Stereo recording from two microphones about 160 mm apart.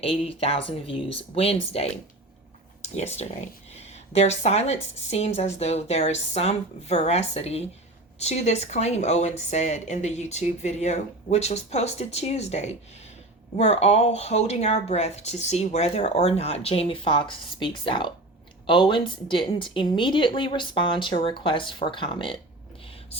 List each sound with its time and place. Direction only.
0.0 s speech: 40° left (ahead or behind)